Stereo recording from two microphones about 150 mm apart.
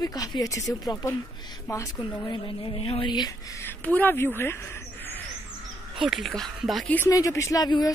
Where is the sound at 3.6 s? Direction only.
10° left (ahead or behind).